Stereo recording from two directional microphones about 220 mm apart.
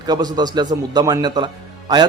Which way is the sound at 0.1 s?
20° right (ahead or behind).